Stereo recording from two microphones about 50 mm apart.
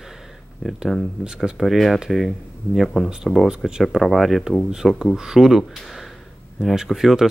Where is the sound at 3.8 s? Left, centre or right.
Centre.